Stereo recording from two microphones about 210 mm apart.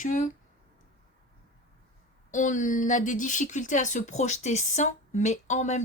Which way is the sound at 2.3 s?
35° left (ahead or behind).